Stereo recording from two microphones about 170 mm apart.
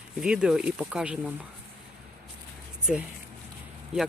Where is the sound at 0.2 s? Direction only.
5° right (ahead or behind).